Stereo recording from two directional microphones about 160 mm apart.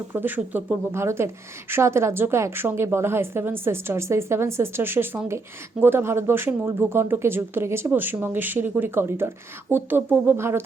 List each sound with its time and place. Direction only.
0.1 s speech: 10° right (ahead or behind)